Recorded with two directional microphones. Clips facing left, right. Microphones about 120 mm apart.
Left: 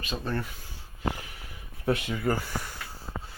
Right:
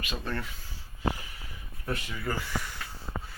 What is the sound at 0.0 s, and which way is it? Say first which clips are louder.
Speech: left 3 dB; 30° left (ahead or behind).